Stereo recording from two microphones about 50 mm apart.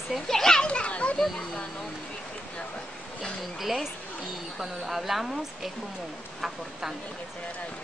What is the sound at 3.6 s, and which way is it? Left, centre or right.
A woman's voice, centre.